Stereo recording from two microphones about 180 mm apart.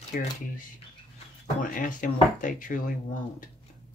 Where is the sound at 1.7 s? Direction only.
50° left (ahead or behind).